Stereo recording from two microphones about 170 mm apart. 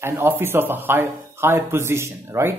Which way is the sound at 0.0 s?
10° right (ahead or behind).